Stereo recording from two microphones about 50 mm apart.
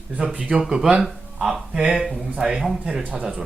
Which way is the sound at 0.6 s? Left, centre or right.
Centre.